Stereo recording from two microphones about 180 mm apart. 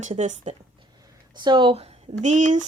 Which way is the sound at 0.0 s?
40° right (ahead or behind).